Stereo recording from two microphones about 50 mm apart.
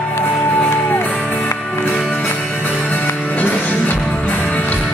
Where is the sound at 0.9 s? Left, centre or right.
Left.